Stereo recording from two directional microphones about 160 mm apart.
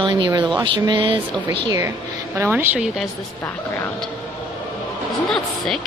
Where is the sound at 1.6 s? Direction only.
20° right (ahead or behind); by 3.1 s centre (ahead or behind).